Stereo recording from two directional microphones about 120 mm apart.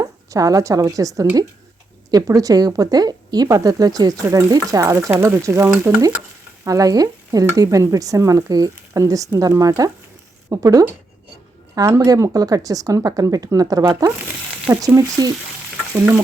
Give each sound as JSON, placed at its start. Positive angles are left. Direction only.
{"t": 0.0, "sound": "a woman's voice", "side_deg": -30}
{"t": 6.7, "sound": "stir", "side_deg": -30}